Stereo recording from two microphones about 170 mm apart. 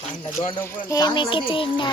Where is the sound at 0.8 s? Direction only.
20° left (ahead or behind).